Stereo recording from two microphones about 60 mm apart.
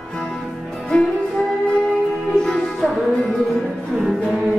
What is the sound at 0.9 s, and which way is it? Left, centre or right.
Music, centre.